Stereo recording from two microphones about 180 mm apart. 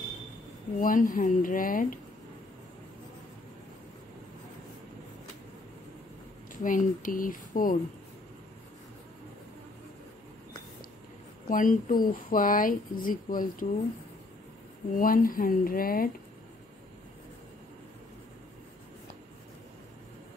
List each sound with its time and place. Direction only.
0.7 s speech: 50° left (ahead or behind)
6.5 s speech: 50° left (ahead or behind)
11.4 s speech: 50° left (ahead or behind)
15.0 s speech: 50° left (ahead or behind)